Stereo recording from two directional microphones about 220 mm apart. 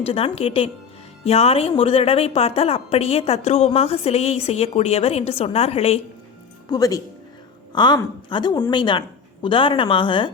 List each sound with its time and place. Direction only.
0.0 s a woman's voice: 25° left (ahead or behind)
6.7 s a woman's voice: 15° left (ahead or behind)